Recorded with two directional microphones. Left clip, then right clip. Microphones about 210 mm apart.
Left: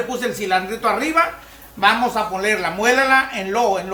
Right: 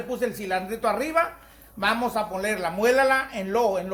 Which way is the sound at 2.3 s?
45° right (ahead or behind).